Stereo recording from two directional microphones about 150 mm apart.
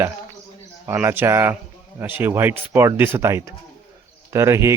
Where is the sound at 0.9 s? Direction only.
15° right (ahead or behind).